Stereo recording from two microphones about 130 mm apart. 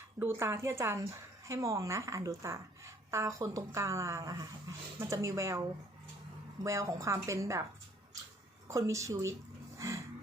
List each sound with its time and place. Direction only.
0.2 s a woman's voice: 20° right (ahead or behind)
8.6 s a woman's voice: 25° right (ahead or behind)
9.7 s a sound: 25° right (ahead or behind)